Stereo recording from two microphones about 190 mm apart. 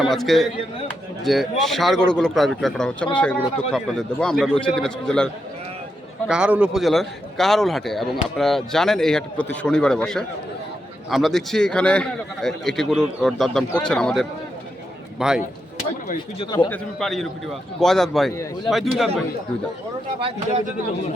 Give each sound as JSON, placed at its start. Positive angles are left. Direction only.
{"t": 0.0, "sound": "a man's voice", "side_deg": 0}
{"t": 16.4, "sound": "speech", "side_deg": 25}
{"t": 16.6, "sound": "a man's voice", "side_deg": 5}